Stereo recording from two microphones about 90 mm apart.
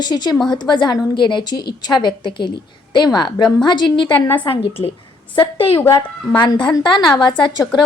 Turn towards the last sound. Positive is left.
turn(degrees=50)  # may be behind; listen again after turning